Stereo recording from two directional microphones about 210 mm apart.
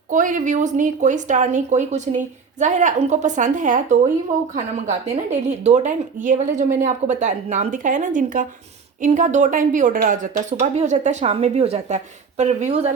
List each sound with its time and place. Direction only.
0.1 s speech: 40° right (ahead or behind)
5.3 s speech: 35° right (ahead or behind)